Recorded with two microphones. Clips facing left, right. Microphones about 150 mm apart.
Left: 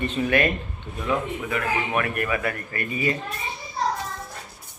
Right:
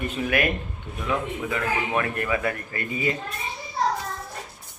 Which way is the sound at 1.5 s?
25° right (ahead or behind).